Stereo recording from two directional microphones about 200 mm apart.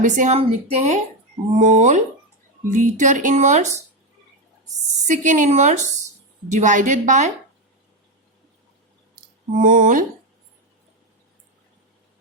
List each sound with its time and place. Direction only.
0.0 s speech: 35° right (ahead or behind)
5.0 s speech: 40° right (ahead or behind)
9.6 s speech: 40° right (ahead or behind)